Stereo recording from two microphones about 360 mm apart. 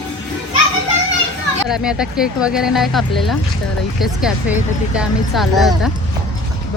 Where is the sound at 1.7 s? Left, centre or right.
Centre.